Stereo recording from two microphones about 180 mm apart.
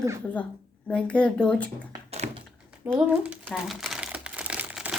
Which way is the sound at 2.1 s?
35° right (ahead or behind).